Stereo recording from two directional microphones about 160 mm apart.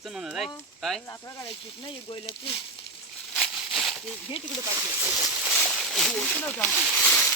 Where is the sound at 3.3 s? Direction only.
Centre (ahead or behind).